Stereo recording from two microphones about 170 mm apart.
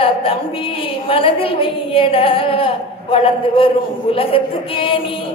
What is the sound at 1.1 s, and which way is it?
A woman's voice, 30° left (ahead or behind).